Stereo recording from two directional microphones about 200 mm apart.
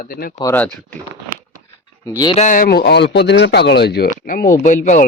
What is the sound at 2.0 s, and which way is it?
Speech, 15° left (ahead or behind).